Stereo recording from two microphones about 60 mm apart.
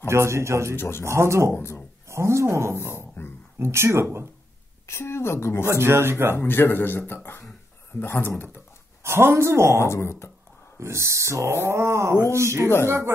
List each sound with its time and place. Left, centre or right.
0.0 s a woman's voice: right
0.7 s a woman's voice: left
1.0 s a woman's voice: right
1.5 s a woman's voice: left
2.0 s speech: right
3.0 s dog: left
3.5 s a woman's voice: right
4.8 s a woman's voice: left
5.7 s a woman's voice: right
6.3 s speech: left
9.0 s a woman's voice: right
9.8 s a woman's voice: left
10.8 s a woman's voice: right